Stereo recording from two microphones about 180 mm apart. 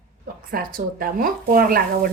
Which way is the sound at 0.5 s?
55° right (ahead or behind).